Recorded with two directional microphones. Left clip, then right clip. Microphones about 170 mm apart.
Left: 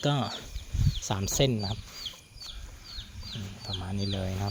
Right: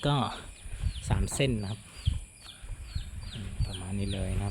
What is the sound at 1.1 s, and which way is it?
Speech, 10° left (ahead or behind).